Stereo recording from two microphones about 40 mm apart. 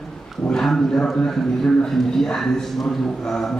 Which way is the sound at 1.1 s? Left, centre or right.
Centre.